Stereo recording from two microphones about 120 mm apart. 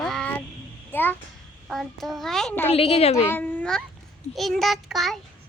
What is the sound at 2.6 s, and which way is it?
Speech, 55° left (ahead or behind).